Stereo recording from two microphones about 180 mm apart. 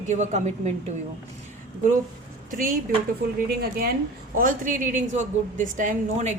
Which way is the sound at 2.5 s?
50° right (ahead or behind).